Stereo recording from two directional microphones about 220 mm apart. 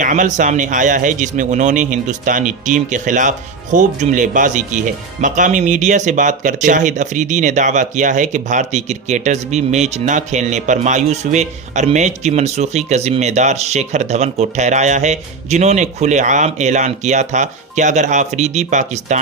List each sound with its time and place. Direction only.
0.0 s speech: 35° right (ahead or behind)